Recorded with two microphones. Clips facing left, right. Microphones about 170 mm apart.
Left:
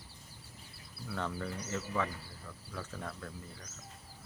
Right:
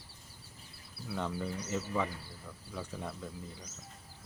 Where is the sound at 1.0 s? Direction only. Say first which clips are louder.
Right 2 dB; 15° right (ahead or behind).